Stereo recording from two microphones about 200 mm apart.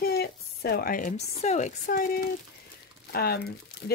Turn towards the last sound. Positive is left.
turn(degrees=50)  # may be behind; listen again after turning